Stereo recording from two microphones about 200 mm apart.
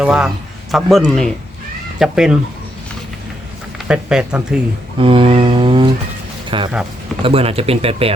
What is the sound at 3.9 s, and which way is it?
Speech, 5° right (ahead or behind).